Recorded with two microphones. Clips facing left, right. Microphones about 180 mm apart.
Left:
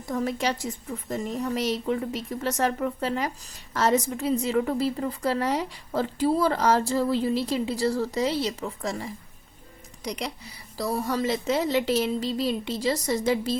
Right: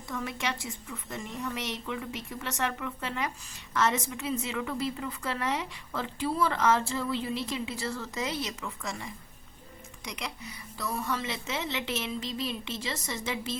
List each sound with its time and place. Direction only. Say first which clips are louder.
0.1 s a woman's voice: left 7 dB; 40° left (ahead or behind)